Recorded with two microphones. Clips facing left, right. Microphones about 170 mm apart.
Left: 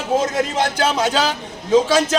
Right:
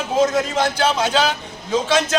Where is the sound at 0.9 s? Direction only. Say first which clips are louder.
Even; 40° left (ahead or behind).